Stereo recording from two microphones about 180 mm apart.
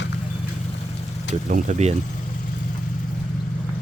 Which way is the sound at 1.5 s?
45° right (ahead or behind).